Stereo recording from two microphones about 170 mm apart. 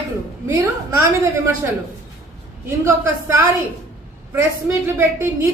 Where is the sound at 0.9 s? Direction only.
15° right (ahead or behind).